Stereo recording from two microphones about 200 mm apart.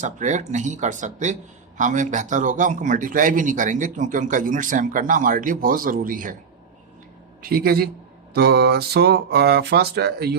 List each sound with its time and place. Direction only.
0.0 s a man's voice: 35° right (ahead or behind)
7.4 s speech: 50° right (ahead or behind)